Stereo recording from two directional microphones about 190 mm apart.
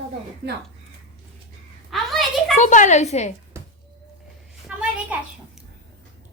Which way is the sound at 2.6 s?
40° left (ahead or behind).